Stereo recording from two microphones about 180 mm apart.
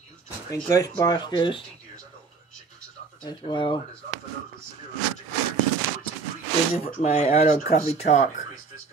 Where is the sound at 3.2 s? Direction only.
25° left (ahead or behind).